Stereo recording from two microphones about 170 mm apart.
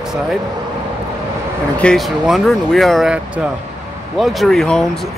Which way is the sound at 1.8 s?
5° left (ahead or behind).